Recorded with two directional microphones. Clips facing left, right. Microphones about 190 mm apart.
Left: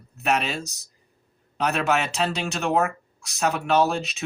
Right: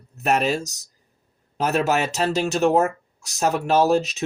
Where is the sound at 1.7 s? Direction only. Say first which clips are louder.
Right 4 dB; 40° right (ahead or behind).